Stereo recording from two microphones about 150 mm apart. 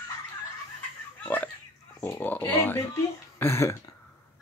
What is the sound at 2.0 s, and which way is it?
Speech, 15° left (ahead or behind).